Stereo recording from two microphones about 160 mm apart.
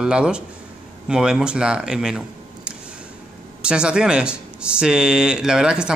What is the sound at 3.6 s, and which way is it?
Speech, 5° right (ahead or behind).